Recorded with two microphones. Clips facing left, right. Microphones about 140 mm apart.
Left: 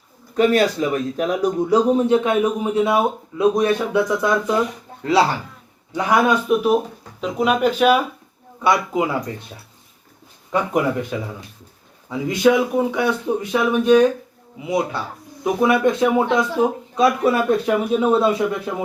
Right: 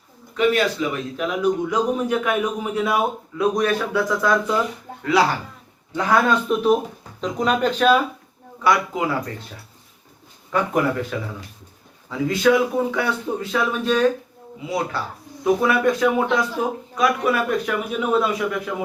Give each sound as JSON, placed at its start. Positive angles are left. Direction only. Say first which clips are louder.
{"t": 0.3, "sound": "speech", "louder": "left 3 dB", "side_deg": 40}
{"t": 5.9, "sound": "speech", "louder": "left 1 dB", "side_deg": 15}
{"t": 8.6, "sound": "speech", "louder": "left 1 dB", "side_deg": 20}
{"t": 10.5, "sound": "speech", "louder": "left 1 dB", "side_deg": 20}